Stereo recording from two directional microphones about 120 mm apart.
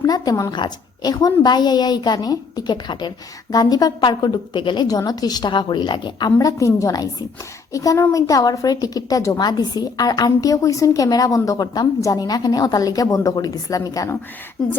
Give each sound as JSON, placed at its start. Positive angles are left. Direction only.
{"t": 0.0, "sound": "a woman's voice", "side_deg": 30}